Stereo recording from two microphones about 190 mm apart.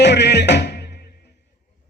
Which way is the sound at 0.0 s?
65° left (ahead or behind).